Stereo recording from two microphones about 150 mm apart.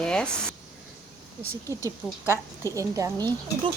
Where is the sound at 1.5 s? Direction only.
20° right (ahead or behind).